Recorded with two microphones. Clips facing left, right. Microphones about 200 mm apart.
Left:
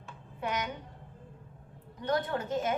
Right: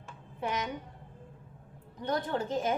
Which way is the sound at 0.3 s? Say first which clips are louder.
Even; 25° right (ahead or behind).